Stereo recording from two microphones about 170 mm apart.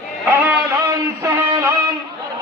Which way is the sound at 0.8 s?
20° right (ahead or behind).